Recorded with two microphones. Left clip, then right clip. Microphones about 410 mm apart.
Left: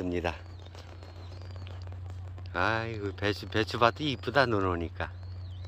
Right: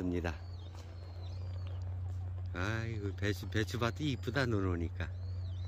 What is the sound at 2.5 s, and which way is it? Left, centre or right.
Speech, centre.